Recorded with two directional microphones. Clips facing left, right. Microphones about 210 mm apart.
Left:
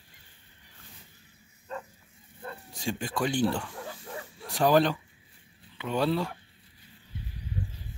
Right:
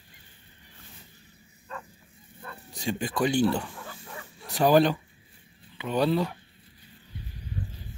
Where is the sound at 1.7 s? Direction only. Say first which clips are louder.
Left 3 dB; 25° left (ahead or behind).